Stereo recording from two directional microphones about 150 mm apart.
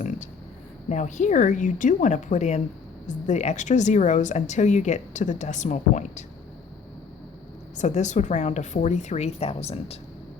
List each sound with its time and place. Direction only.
0.9 s a woman's voice: 55° left (ahead or behind)
7.8 s speech: 50° left (ahead or behind)